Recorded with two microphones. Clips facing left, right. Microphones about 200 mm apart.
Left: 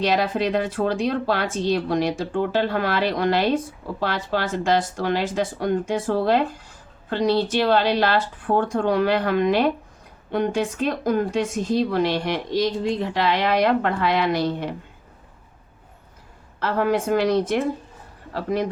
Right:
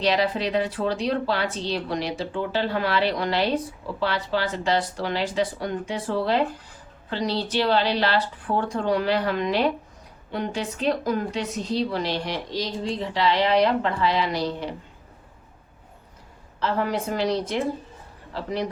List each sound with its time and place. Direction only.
0.0 s a woman's voice: 50° left (ahead or behind)
16.6 s a woman's voice: 55° left (ahead or behind)